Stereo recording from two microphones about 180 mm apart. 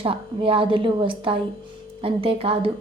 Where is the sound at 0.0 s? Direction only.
30° right (ahead or behind).